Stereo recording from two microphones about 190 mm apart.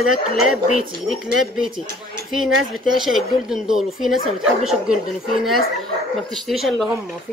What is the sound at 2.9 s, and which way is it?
Speech, centre (ahead or behind).